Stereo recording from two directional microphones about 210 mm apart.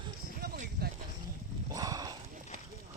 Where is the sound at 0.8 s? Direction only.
50° right (ahead or behind).